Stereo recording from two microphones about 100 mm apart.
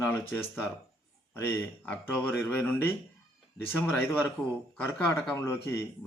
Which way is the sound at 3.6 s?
20° left (ahead or behind).